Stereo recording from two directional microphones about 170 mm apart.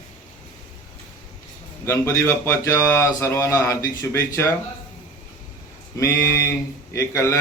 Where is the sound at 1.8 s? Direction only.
15° left (ahead or behind).